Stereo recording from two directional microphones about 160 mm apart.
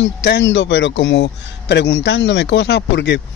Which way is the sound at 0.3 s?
90° left.